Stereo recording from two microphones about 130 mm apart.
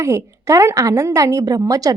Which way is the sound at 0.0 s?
20° right (ahead or behind).